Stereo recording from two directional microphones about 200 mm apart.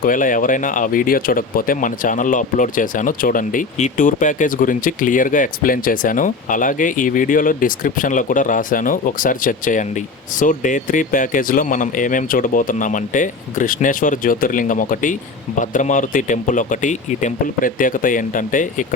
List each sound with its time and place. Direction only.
0.0 s speech: 40° left (ahead or behind)